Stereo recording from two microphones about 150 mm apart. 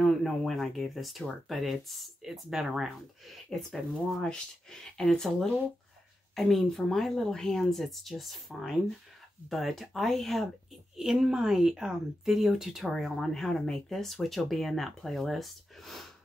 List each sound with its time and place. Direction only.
0.0 s speech: centre (ahead or behind)